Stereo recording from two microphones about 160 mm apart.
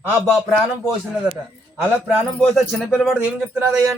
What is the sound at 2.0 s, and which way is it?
A man's voice, centre (ahead or behind).